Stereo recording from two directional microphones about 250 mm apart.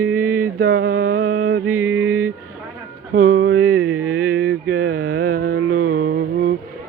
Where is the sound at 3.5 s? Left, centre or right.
Right.